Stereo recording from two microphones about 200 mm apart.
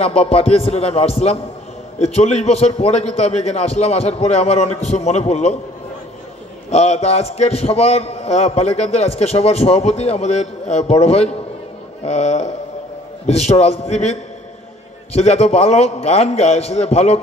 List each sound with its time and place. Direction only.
0.0 s a man's voice: 30° left (ahead or behind)
6.7 s a man's voice: 30° left (ahead or behind)
15.1 s a man's voice: 30° left (ahead or behind)